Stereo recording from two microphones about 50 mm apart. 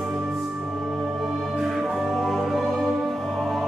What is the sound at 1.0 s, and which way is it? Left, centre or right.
Music, centre.